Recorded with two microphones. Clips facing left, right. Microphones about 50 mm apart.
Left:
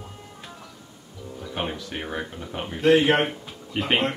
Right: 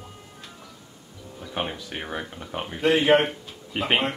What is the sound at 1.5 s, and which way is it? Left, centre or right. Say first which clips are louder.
Speech: even; centre.